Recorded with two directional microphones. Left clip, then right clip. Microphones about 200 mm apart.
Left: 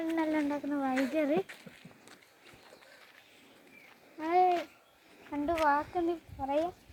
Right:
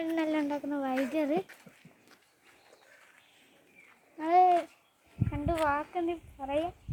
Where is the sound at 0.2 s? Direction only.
55° right (ahead or behind).